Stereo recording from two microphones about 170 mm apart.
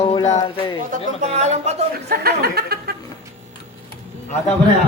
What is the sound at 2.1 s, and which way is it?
Speech, 70° right (ahead or behind).